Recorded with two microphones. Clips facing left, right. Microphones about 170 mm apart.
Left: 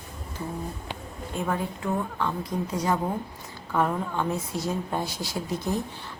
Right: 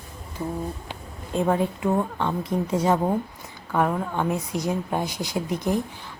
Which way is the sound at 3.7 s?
15° right (ahead or behind).